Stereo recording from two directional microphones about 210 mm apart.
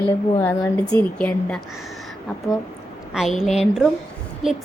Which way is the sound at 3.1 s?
Centre (ahead or behind).